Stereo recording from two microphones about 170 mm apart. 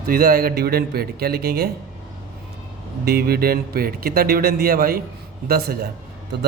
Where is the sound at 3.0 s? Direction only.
65° right (ahead or behind).